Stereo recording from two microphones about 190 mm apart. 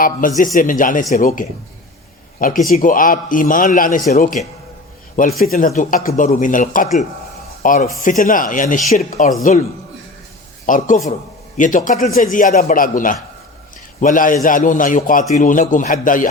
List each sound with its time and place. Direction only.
0.0 s a man's voice: 45° left (ahead or behind)
2.6 s a man's voice: 50° left (ahead or behind)
5.4 s a man's voice: 45° left (ahead or behind)
10.7 s a man's voice: 40° left (ahead or behind)